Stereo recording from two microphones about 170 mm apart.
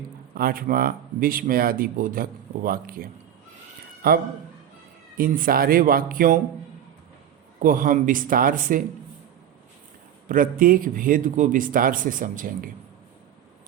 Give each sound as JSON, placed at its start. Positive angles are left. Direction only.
{"t": 0.3, "sound": "speech", "side_deg": -60}
{"t": 7.6, "sound": "a man's voice", "side_deg": -55}
{"t": 10.2, "sound": "a man's voice", "side_deg": -55}